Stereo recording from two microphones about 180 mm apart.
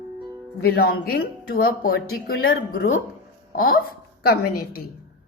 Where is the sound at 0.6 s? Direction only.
60° left (ahead or behind).